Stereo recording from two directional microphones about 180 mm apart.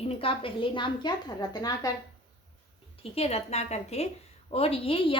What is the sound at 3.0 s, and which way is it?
A woman's voice, 35° left (ahead or behind).